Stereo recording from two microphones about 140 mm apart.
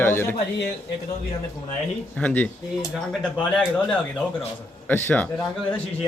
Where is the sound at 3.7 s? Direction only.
5° left (ahead or behind).